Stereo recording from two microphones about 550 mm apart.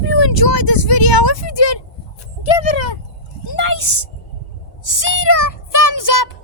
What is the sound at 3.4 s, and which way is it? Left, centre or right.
Speech, left.